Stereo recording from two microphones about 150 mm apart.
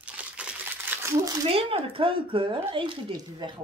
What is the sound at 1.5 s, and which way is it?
Speech, 40° right (ahead or behind).